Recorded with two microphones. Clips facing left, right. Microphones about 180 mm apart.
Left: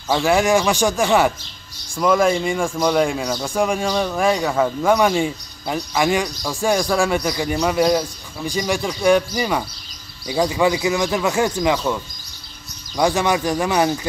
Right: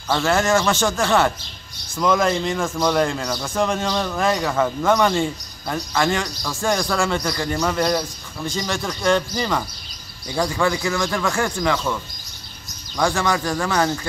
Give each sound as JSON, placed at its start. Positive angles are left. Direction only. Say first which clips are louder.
{"t": 0.1, "sound": "speech", "louder": "left 2 dB", "side_deg": 15}